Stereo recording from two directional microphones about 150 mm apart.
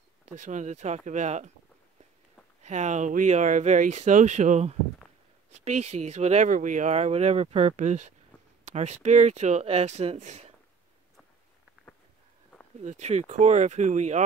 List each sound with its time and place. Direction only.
0.4 s speech: 55° right (ahead or behind)
2.6 s speech: 50° right (ahead or behind)
12.8 s speech: 50° right (ahead or behind)